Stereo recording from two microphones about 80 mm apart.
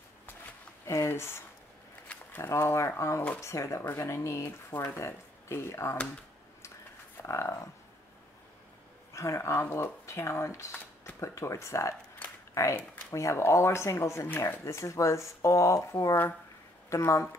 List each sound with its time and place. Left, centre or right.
0.8 s speech: left
7.2 s speech: left
9.1 s speech: left